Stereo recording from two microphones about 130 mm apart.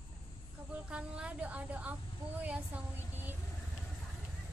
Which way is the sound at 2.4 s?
10° right (ahead or behind).